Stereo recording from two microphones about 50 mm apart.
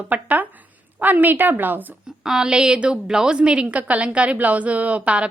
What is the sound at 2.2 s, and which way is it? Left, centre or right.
A woman's voice, centre.